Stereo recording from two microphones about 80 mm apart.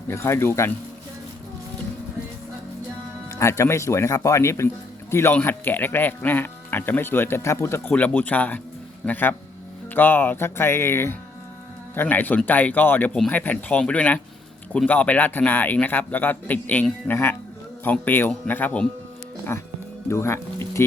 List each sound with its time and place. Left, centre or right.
0.1 s speech: left
3.3 s speech: left
5.3 s speech: left
7.9 s speech: left
19.5 s speech: left